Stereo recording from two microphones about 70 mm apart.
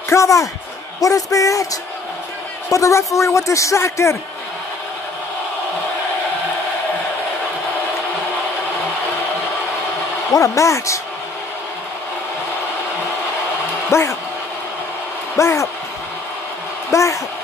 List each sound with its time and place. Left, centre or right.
0.1 s a man's voice: left
10.3 s a man's voice: left
13.8 s a man's voice: left
15.3 s a man's voice: left
16.9 s a man's voice: left